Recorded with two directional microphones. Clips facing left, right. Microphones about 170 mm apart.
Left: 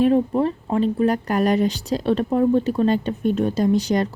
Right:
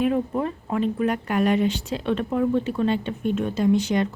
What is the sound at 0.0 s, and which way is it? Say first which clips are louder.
Speech: left 5 dB; 35° left (ahead or behind).